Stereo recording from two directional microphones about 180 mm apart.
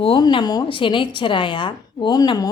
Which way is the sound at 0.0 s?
25° left (ahead or behind).